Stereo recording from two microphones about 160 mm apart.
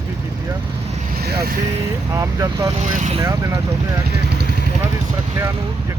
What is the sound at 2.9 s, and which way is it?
Speech, 50° right (ahead or behind).